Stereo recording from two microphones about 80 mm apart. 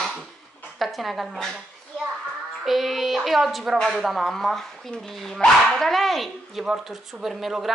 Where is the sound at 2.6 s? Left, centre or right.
Centre.